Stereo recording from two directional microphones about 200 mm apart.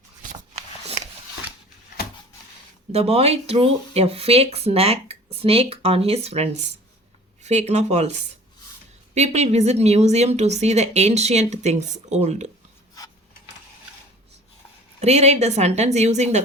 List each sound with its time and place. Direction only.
0.2 s a sound: 35° right (ahead or behind)
2.9 s a woman's voice: 30° right (ahead or behind)
15.0 s a woman's voice: 35° right (ahead or behind)